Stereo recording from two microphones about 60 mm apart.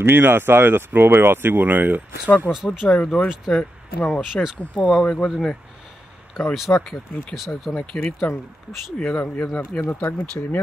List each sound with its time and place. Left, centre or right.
0.0 s speech: right
2.2 s speech: left
2.5 s speech: centre
2.9 s speech: centre
3.3 s speech: centre
4.6 s speech: left
6.7 s speech: left
7.3 s speech: centre
7.7 s speech: centre
8.3 s speech: left
8.9 s speech: centre
9.7 s speech: left
10.0 s speech: left